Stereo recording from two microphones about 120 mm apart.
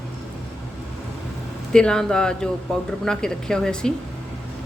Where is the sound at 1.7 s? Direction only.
5° left (ahead or behind).